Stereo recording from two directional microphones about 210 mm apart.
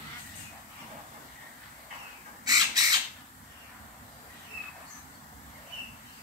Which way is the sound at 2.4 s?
20° right (ahead or behind).